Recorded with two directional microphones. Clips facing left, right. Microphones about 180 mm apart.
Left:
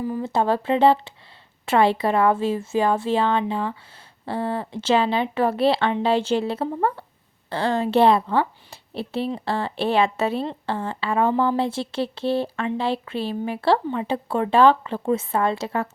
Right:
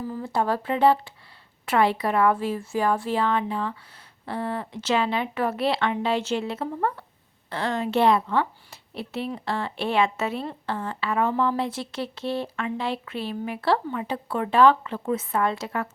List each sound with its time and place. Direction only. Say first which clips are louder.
0.0 s speech: left 4 dB; 20° left (ahead or behind)